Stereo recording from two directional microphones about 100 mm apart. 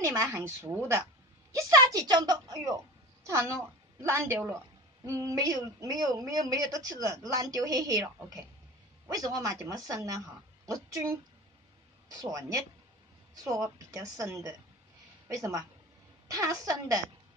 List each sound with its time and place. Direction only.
0.0 s a woman's voice: 30° right (ahead or behind)
5.0 s speech: 35° right (ahead or behind)